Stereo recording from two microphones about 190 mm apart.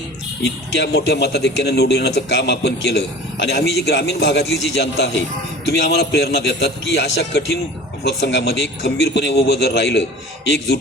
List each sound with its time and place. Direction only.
0.8 s a man's voice: 60° left (ahead or behind)